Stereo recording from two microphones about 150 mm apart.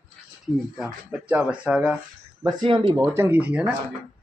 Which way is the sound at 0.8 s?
10° right (ahead or behind).